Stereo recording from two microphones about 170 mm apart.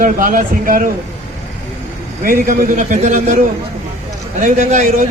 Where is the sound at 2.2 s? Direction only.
55° right (ahead or behind).